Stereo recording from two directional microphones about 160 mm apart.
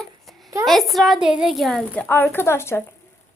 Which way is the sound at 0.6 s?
Centre (ahead or behind).